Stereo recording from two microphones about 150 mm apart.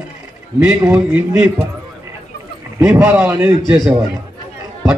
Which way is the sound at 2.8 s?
15° right (ahead or behind).